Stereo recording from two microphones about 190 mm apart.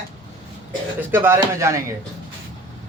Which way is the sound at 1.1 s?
10° right (ahead or behind).